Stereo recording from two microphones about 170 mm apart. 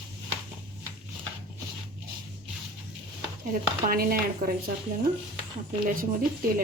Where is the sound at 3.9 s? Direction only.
60° right (ahead or behind).